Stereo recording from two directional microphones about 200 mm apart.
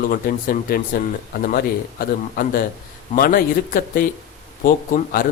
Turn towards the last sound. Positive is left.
turn(degrees=45)  # may be behind; listen again after turning